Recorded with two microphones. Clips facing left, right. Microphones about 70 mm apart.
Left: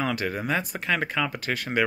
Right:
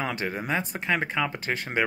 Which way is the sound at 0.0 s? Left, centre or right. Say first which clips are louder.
Left 2 dB; right.